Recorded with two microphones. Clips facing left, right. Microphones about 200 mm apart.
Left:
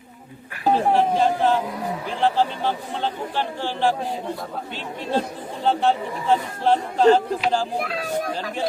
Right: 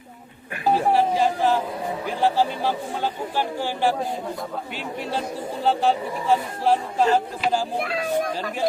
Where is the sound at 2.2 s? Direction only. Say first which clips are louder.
Even; 10° right (ahead or behind).